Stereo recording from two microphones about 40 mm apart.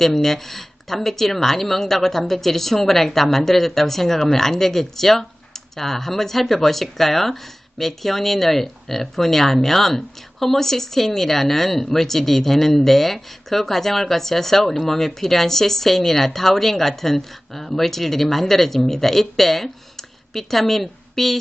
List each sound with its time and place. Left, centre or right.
0.0 s speech: centre